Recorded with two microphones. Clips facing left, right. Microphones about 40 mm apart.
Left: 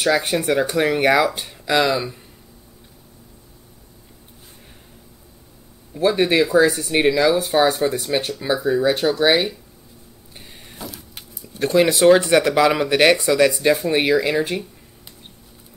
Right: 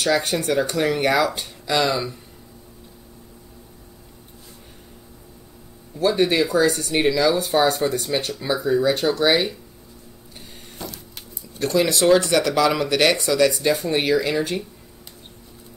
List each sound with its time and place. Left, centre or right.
0.0 s speech: centre
6.0 s speech: left
6.7 s speech: centre
10.8 s a sound: centre
11.6 s speech: left